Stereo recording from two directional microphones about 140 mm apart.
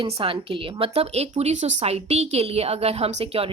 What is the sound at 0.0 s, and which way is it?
Speech, 40° right (ahead or behind).